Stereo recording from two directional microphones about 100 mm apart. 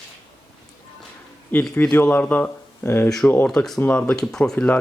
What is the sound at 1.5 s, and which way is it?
Speech, 20° left (ahead or behind).